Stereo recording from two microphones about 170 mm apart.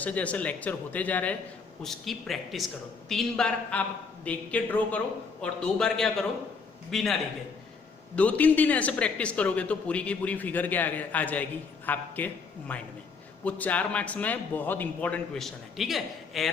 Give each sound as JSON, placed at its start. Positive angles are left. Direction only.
{"t": 0.0, "sound": "a man's voice", "side_deg": 10}